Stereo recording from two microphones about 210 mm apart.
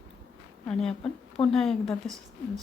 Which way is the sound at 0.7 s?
Centre (ahead or behind).